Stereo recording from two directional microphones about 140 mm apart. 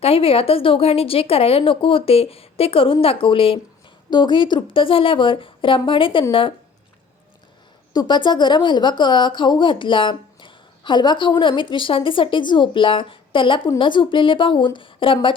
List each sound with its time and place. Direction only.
0.0 s speech: 45° left (ahead or behind)
7.9 s speech: 30° left (ahead or behind)